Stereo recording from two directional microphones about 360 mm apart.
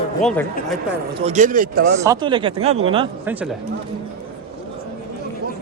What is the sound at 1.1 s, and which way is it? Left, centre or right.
Speech, centre.